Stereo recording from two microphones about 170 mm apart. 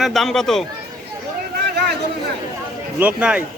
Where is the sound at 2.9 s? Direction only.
5° right (ahead or behind).